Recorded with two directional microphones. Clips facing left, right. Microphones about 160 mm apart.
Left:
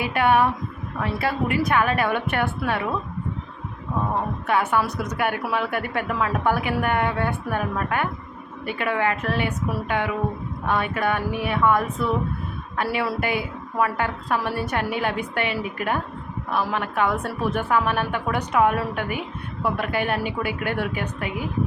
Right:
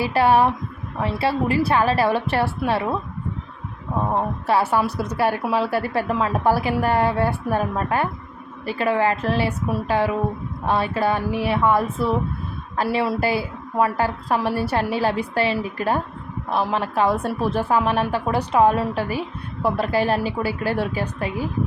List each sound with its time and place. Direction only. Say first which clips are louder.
0.0 s a woman's voice: right 3 dB; 35° right (ahead or behind)
4.1 s a woman's voice: right 3 dB; 30° right (ahead or behind)